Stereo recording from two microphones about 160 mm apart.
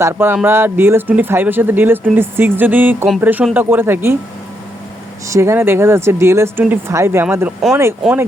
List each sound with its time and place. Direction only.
0.0 s speech: 15° right (ahead or behind)
5.3 s speech: 15° right (ahead or behind)